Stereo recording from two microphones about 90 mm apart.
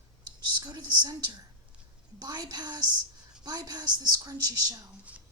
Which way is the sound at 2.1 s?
45° right (ahead or behind).